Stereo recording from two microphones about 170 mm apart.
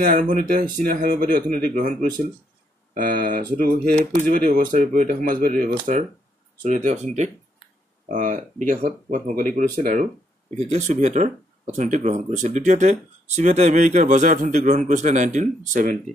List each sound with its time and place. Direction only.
0.0 s speech: 55° right (ahead or behind)